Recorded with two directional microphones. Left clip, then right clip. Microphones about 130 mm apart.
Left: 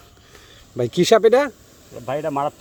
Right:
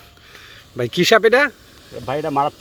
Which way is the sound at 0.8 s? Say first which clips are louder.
Right 1 dB; 30° left (ahead or behind).